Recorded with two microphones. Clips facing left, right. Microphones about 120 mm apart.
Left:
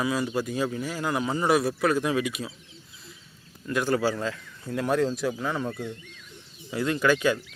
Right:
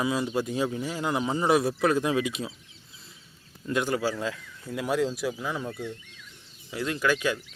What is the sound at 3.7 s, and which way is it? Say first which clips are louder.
Speech: left 2 dB; 15° right (ahead or behind).